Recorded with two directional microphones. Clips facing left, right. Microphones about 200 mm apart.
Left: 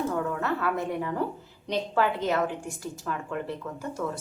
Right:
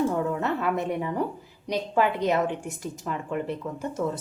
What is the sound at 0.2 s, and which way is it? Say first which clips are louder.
Speech: right 2 dB; 20° right (ahead or behind).